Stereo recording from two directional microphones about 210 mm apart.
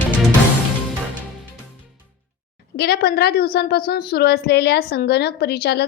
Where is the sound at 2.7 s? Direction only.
50° left (ahead or behind).